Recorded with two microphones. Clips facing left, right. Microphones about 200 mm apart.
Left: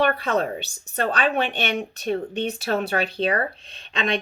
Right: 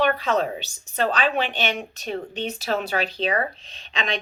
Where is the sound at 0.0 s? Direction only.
55° left (ahead or behind).